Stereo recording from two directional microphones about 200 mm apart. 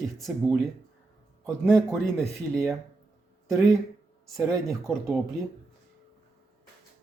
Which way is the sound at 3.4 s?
15° right (ahead or behind).